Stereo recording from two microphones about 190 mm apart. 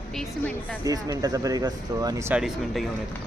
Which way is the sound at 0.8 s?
20° right (ahead or behind).